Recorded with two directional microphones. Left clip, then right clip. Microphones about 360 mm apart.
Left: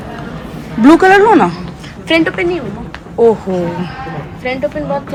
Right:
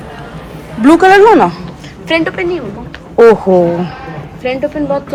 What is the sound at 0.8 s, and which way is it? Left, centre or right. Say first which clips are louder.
Speech: right 2 dB; centre.